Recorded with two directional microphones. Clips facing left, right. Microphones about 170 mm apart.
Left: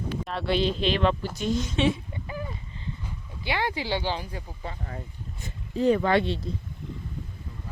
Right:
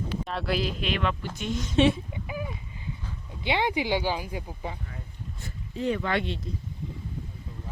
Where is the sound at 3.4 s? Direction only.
20° right (ahead or behind).